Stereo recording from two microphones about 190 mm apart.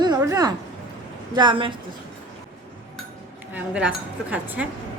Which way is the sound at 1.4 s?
25° right (ahead or behind).